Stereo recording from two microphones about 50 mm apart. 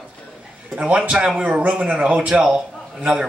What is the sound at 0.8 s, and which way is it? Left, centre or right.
A man's voice, right.